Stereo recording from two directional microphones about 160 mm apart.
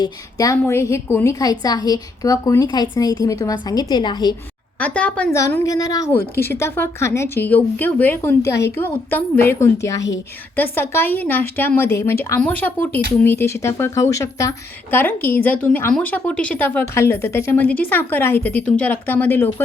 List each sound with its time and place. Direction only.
0.0 s a woman's voice: 20° left (ahead or behind)
4.8 s speech: 10° left (ahead or behind)